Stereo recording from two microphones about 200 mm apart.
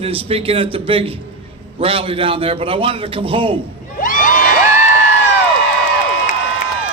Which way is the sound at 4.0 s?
45° left (ahead or behind).